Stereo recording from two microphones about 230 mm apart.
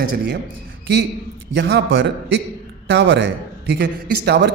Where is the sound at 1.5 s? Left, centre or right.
Right.